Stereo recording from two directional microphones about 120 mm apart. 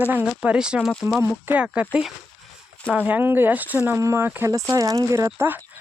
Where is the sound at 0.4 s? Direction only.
10° right (ahead or behind).